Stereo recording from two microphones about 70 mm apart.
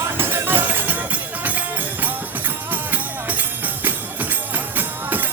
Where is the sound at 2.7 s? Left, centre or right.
Right.